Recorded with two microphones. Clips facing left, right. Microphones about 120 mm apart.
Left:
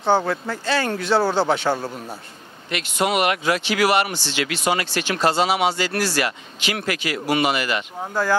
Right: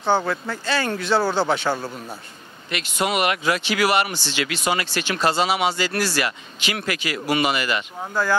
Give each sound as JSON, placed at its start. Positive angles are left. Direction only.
{"t": 0.0, "sound": "speech", "side_deg": 35}
{"t": 1.9, "sound": "a man's voice", "side_deg": 25}
{"t": 2.7, "sound": "speech", "side_deg": 55}
{"t": 8.0, "sound": "speech", "side_deg": 35}